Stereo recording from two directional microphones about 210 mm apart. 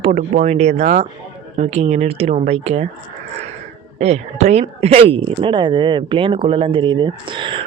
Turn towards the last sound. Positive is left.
turn(degrees=-25)  # may be behind; listen again after turning